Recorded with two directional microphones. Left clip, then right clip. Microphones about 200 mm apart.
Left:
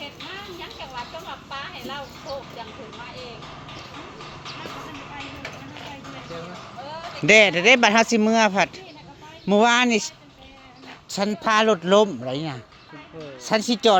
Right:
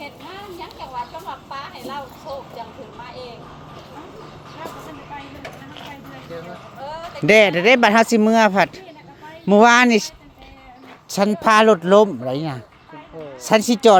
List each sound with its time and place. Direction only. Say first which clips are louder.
7.3 s speech: right 2 dB; 20° right (ahead or behind)
11.1 s speech: right 6 dB; 30° right (ahead or behind)